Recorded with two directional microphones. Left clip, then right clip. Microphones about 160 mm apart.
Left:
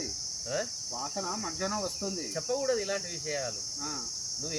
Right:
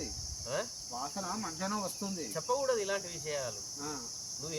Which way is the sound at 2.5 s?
5° right (ahead or behind).